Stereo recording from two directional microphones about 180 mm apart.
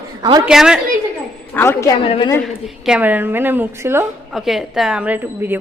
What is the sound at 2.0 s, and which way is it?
Speech, 35° left (ahead or behind).